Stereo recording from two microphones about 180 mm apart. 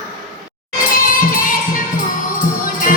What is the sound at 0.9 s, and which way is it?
Music, 50° left (ahead or behind).